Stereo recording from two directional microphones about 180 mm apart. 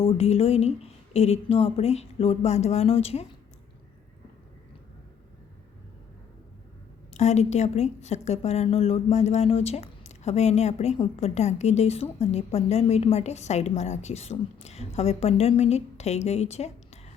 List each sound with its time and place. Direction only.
0.0 s a woman's voice: 35° left (ahead or behind)
7.1 s a woman's voice: 40° left (ahead or behind)